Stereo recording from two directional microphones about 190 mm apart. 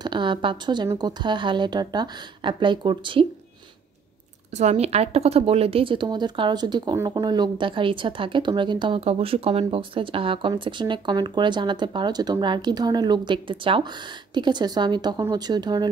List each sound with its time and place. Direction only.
0.0 s speech: 25° right (ahead or behind)
4.6 s speech: 35° right (ahead or behind)